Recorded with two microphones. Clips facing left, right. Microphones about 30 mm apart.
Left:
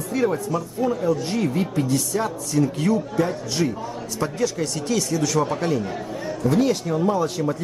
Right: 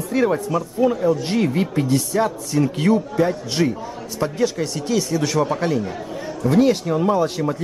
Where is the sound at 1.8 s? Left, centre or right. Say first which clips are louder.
Right 4 dB; centre.